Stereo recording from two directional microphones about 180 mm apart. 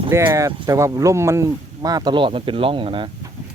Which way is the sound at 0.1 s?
15° right (ahead or behind).